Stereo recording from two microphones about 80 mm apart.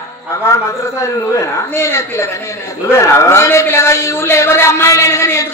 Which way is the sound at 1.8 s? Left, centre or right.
Left.